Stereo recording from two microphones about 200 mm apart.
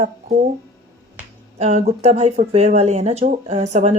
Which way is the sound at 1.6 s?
35° right (ahead or behind).